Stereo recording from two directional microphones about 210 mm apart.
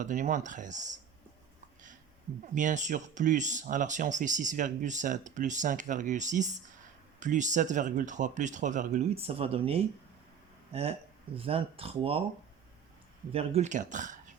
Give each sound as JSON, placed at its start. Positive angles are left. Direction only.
{"t": 0.0, "sound": "speech", "side_deg": -35}
{"t": 2.6, "sound": "speech", "side_deg": -35}
{"t": 13.3, "sound": "speech", "side_deg": -30}